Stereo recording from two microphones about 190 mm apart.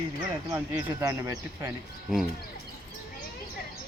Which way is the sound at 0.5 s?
15° right (ahead or behind).